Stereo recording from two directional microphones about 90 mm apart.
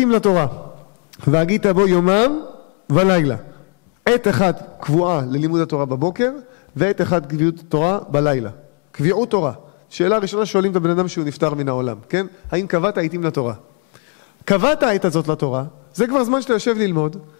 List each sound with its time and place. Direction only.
0.0 s a man's voice: 15° left (ahead or behind)